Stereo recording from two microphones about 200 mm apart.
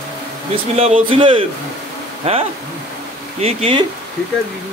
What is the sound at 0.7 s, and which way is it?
Speech, 30° right (ahead or behind).